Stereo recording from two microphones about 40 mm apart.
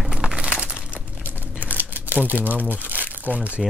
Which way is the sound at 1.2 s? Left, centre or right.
Right.